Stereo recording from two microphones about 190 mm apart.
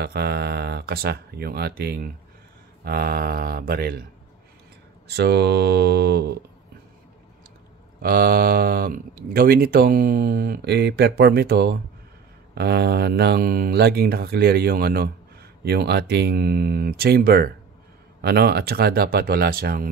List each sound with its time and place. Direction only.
0.0 s speech: 55° right (ahead or behind)
5.0 s speech: 60° right (ahead or behind)
8.0 s speech: 50° right (ahead or behind)